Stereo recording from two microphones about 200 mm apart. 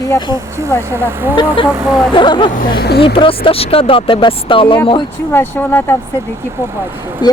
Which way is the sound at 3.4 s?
30° left (ahead or behind).